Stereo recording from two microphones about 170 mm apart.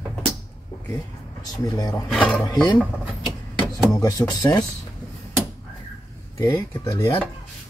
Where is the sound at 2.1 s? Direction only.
5° left (ahead or behind).